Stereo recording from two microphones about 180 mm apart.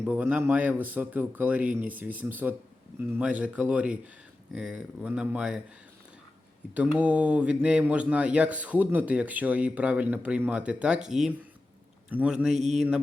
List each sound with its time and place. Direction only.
0.0 s speech: 5° right (ahead or behind)
6.7 s speech: 5° right (ahead or behind)
12.5 s mantra: 40° right (ahead or behind)